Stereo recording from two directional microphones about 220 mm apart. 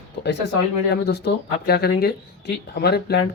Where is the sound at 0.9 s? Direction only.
50° left (ahead or behind).